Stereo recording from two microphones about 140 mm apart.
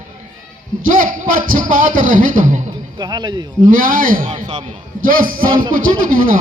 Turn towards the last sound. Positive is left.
turn(degrees=-80)